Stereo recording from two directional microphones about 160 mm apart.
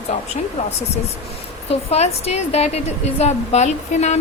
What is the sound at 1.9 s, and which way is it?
A woman's voice, 40° left (ahead or behind).